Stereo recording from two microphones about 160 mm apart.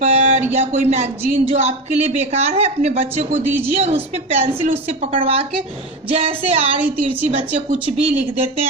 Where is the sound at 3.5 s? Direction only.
15° right (ahead or behind).